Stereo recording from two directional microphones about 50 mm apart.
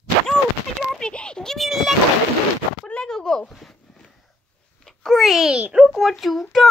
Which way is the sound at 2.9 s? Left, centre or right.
Centre.